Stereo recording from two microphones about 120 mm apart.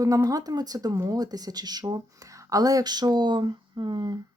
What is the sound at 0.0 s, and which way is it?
Speech, 30° right (ahead or behind).